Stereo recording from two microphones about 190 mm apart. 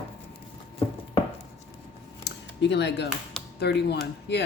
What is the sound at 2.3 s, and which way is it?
Typing, 65° left (ahead or behind).